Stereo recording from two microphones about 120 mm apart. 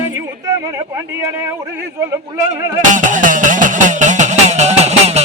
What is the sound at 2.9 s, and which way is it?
Music, 90° right.